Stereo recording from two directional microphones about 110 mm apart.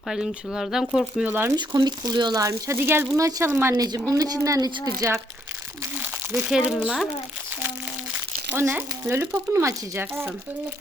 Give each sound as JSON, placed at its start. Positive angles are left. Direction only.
{"t": 0.1, "sound": "speech", "side_deg": -5}
{"t": 1.2, "sound": "speech", "side_deg": -15}
{"t": 1.5, "sound": "speech", "side_deg": -40}
{"t": 3.8, "sound": "speech", "side_deg": -35}
{"t": 6.5, "sound": "speech", "side_deg": -5}
{"t": 8.5, "sound": "speech", "side_deg": -20}